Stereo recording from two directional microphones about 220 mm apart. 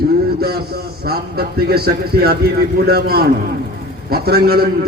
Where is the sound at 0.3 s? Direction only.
45° right (ahead or behind).